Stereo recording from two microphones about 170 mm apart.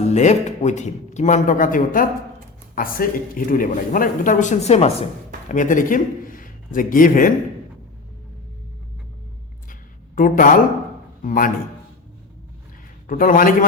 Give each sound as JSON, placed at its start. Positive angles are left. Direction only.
{"t": 0.0, "sound": "speech", "side_deg": 40}
{"t": 5.5, "sound": "a man's voice", "side_deg": 50}
{"t": 10.2, "sound": "speech", "side_deg": 50}
{"t": 13.1, "sound": "speech", "side_deg": 50}